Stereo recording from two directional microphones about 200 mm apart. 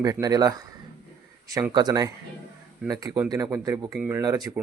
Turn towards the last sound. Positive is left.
turn(degrees=-20)  # may be behind; listen again after turning